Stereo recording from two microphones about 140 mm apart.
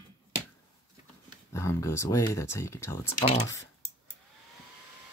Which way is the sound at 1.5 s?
20° left (ahead or behind).